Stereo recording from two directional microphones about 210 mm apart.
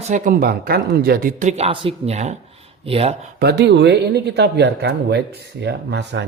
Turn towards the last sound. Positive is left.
turn(degrees=-55)  # may be behind; listen again after turning